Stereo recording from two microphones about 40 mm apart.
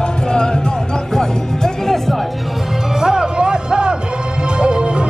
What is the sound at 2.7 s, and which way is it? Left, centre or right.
Music, centre.